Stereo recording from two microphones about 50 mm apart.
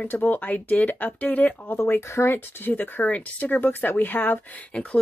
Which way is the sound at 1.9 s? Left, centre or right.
Left.